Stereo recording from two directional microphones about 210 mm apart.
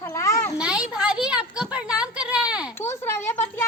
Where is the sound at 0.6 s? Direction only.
5° right (ahead or behind).